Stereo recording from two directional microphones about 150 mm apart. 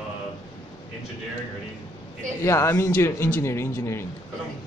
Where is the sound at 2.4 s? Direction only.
20° left (ahead or behind).